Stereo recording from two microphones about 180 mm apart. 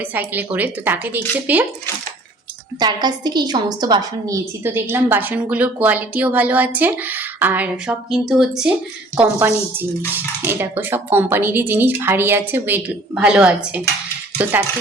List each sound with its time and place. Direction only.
0.0 s a woman's voice: 10° right (ahead or behind)
2.7 s a woman's voice: 25° right (ahead or behind); by 13.8 s 5° right (ahead or behind)